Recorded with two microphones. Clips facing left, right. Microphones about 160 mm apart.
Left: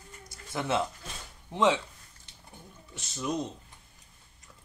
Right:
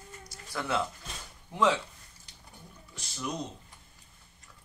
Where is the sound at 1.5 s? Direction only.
20° left (ahead or behind).